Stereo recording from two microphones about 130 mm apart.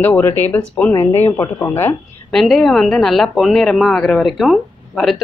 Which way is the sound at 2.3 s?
Centre (ahead or behind).